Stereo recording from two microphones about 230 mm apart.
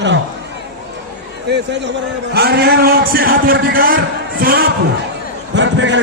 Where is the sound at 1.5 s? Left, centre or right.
Right.